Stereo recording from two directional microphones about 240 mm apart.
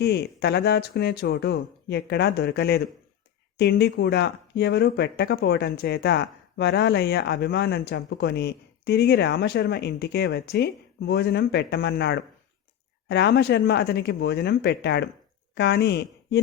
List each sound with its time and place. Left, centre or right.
0.0 s speech: left